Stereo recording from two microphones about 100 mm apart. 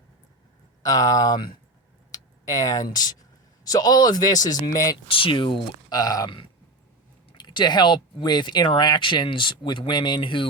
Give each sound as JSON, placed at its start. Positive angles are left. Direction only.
{"t": 0.8, "sound": "a man's voice", "side_deg": 35}
{"t": 5.1, "sound": "speech", "side_deg": 60}
{"t": 5.9, "sound": "a man's voice", "side_deg": 40}
{"t": 7.3, "sound": "speech", "side_deg": 45}